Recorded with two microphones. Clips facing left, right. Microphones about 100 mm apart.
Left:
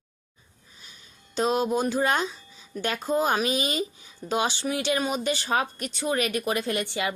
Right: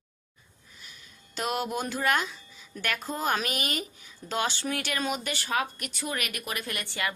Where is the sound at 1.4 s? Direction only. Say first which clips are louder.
Left 6 dB; 20° left (ahead or behind).